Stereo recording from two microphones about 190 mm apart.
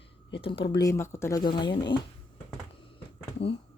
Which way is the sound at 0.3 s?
25° left (ahead or behind).